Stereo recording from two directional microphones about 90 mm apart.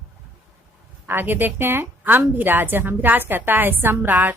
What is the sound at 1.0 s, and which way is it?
A woman's voice, 20° right (ahead or behind).